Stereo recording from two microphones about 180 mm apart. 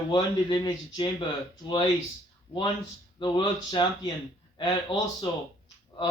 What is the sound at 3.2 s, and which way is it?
Speech, 25° left (ahead or behind).